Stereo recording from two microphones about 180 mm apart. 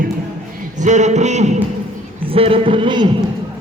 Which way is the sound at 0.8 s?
40° right (ahead or behind).